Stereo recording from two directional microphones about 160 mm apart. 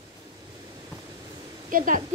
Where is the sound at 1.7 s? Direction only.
55° right (ahead or behind).